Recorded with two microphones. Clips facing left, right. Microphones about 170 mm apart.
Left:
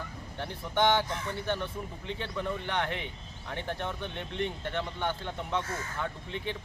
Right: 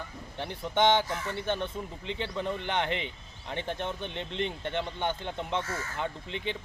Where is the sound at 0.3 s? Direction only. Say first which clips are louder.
Right 2 dB; 20° right (ahead or behind).